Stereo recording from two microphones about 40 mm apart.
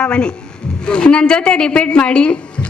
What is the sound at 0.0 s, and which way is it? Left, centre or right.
A woman's voice, left.